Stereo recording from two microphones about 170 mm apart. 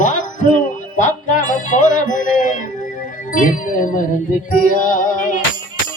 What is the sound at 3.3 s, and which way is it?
Speech, 50° left (ahead or behind).